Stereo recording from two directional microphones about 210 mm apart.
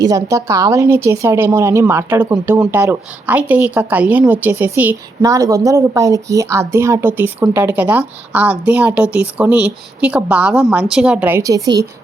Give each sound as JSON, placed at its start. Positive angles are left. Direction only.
{"t": 0.0, "sound": "a woman's voice", "side_deg": -15}